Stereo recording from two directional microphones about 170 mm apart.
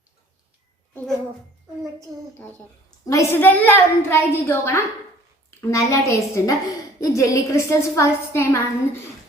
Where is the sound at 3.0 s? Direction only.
20° left (ahead or behind).